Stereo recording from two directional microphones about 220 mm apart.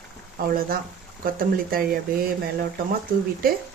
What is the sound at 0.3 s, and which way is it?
Speech, 40° right (ahead or behind).